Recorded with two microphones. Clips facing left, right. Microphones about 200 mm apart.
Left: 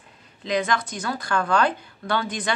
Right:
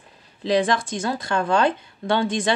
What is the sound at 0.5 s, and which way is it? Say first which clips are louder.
Speech: right 4 dB; 30° right (ahead or behind).